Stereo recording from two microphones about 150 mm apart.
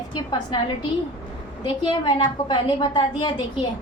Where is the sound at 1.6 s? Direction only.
30° left (ahead or behind).